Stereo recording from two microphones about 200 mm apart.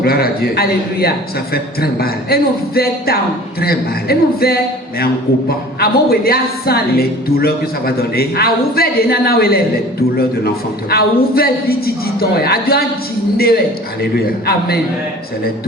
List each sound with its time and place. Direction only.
0.0 s a woman's voice: 50° left (ahead or behind)